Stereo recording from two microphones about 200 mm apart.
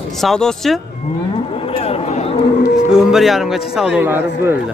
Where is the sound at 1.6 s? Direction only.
30° left (ahead or behind).